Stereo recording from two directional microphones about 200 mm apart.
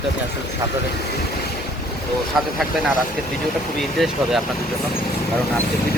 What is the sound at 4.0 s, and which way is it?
Speech, centre (ahead or behind).